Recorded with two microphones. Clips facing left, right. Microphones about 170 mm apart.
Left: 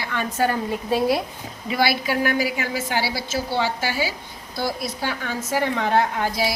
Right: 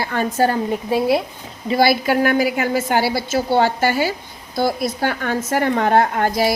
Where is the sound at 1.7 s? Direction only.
40° right (ahead or behind).